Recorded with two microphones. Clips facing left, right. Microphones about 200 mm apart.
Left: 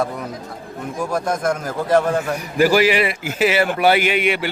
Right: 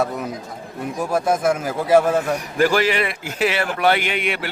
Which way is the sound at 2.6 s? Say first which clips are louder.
Left 3 dB; 5° left (ahead or behind).